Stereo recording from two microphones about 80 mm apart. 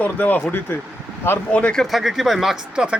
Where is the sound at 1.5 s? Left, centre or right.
Centre.